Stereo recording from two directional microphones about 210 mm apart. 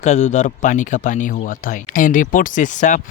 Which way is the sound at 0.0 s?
35° left (ahead or behind).